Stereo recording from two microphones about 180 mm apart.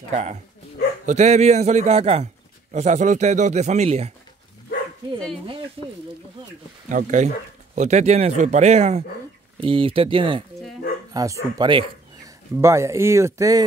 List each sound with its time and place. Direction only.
0.1 s a man's voice: 40° right (ahead or behind)
6.9 s a man's voice: 45° right (ahead or behind); by 13.7 s 20° right (ahead or behind)